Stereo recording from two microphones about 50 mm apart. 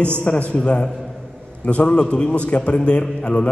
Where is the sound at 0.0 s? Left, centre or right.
Left.